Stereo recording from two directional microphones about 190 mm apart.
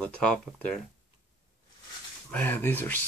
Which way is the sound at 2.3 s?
10° left (ahead or behind).